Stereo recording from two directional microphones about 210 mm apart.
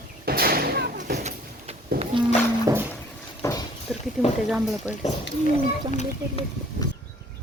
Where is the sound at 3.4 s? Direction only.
20° left (ahead or behind).